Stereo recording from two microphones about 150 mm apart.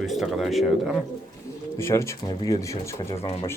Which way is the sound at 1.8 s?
20° left (ahead or behind).